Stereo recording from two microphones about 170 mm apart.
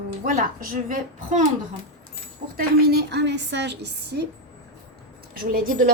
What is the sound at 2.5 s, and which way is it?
A woman's voice, 70° right (ahead or behind).